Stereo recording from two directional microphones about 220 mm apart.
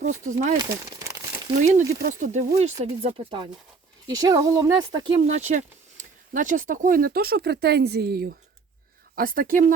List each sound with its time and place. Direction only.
0.3 s speech: 35° right (ahead or behind)
0.5 s speech: 15° right (ahead or behind)
1.5 s speech: 35° right (ahead or behind)